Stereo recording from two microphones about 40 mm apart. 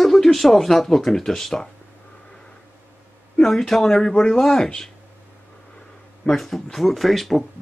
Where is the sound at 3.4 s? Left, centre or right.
Centre.